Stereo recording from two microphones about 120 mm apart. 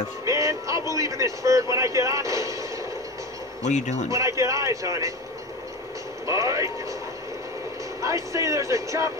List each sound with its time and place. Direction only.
0.2 s speech: 25° right (ahead or behind)
3.6 s speech: 75° left (ahead or behind)
4.1 s speech: 25° right (ahead or behind)
6.2 s speech: 25° right (ahead or behind)
8.0 s speech: 25° right (ahead or behind)